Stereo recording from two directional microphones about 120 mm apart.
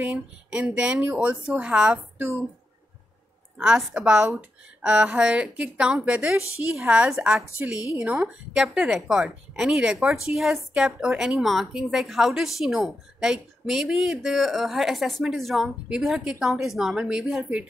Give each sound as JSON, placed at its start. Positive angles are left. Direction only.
{"t": 0.0, "sound": "a woman's voice", "side_deg": -10}
{"t": 3.5, "sound": "a woman's voice", "side_deg": -5}
{"t": 4.2, "sound": "speech", "side_deg": -20}
{"t": 4.8, "sound": "a woman's voice", "side_deg": -10}